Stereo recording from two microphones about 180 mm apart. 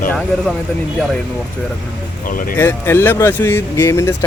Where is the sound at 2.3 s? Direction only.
50° left (ahead or behind).